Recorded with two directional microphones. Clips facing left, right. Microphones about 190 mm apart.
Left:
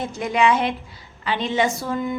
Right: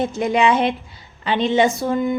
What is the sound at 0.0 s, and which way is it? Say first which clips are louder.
A woman's voice: right 3 dB; 25° right (ahead or behind).